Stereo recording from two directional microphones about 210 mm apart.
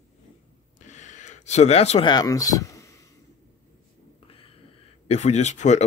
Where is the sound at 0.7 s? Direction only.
35° left (ahead or behind); by 3.0 s 15° left (ahead or behind).